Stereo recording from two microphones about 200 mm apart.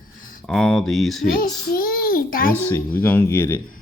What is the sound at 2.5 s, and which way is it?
Speech, 10° left (ahead or behind).